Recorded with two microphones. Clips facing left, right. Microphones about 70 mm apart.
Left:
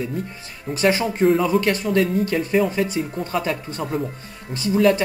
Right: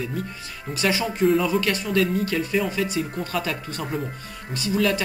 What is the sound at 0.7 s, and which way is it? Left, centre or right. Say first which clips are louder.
Speech: left 4 dB; left.